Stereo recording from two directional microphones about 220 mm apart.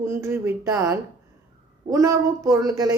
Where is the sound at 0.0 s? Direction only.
10° right (ahead or behind).